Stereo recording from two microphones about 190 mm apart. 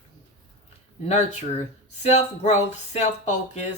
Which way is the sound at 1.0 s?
35° left (ahead or behind).